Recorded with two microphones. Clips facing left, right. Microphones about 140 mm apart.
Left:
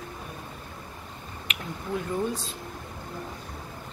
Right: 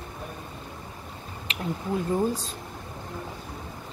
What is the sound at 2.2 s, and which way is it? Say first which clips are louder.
Speech: right 3 dB; 40° right (ahead or behind).